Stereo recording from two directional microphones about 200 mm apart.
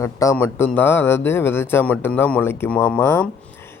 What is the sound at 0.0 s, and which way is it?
Speech, 15° left (ahead or behind).